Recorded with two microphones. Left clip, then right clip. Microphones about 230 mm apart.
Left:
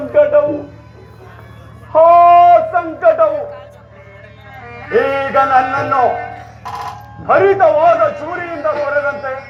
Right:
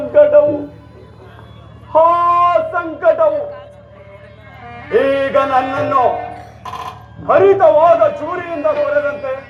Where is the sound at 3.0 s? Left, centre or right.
Right.